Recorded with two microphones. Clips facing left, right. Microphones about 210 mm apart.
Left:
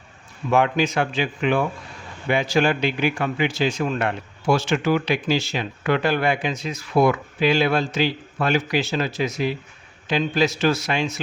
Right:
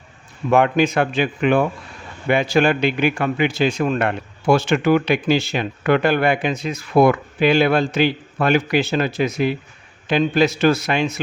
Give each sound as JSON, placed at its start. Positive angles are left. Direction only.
{"t": 0.5, "sound": "a man's voice", "side_deg": -55}